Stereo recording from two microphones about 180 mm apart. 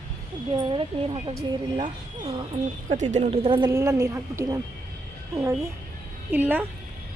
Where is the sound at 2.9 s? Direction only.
40° right (ahead or behind).